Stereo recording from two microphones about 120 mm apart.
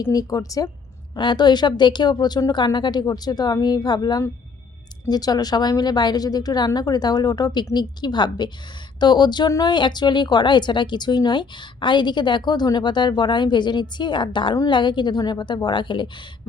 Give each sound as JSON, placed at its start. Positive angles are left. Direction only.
{"t": 0.1, "sound": "a woman's voice", "side_deg": 30}